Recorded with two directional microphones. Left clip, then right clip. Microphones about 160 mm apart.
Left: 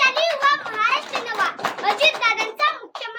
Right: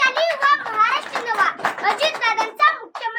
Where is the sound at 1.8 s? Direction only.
20° left (ahead or behind).